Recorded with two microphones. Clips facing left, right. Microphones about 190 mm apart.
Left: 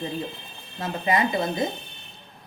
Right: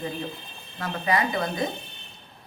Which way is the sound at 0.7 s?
25° left (ahead or behind).